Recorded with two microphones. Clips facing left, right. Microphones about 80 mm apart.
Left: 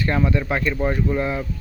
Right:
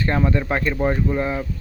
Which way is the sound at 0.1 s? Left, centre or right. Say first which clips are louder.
Right 1 dB; right.